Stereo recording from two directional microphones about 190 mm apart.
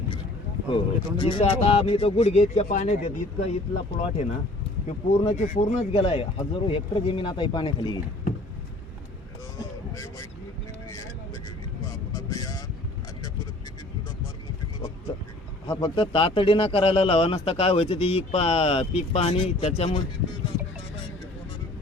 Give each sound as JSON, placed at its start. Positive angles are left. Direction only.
{"t": 0.7, "sound": "speech", "side_deg": 25}
{"t": 9.9, "sound": "vehicle", "side_deg": 15}
{"t": 12.1, "sound": "vehicle", "side_deg": 20}
{"t": 15.6, "sound": "speech", "side_deg": 20}